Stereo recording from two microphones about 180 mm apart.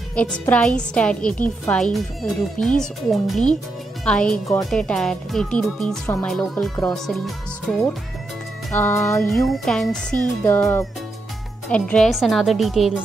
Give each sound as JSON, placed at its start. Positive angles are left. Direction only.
{"t": 0.1, "sound": "a woman's voice", "side_deg": 5}
{"t": 8.7, "sound": "a woman's voice", "side_deg": 15}
{"t": 9.3, "sound": "speech", "side_deg": 0}
{"t": 10.4, "sound": "a woman's voice", "side_deg": 10}